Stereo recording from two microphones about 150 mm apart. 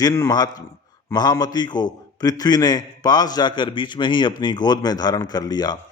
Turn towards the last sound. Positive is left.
turn(degrees=30)  # may be behind; listen again after turning